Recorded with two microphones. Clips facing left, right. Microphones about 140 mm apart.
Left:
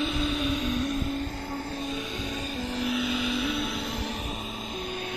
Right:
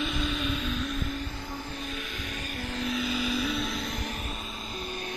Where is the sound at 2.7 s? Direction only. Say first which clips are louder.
Left 1 dB; 10° left (ahead or behind).